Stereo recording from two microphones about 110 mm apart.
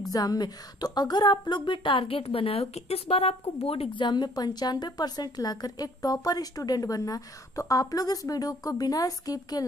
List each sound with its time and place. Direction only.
0.1 s a woman's voice: 35° left (ahead or behind)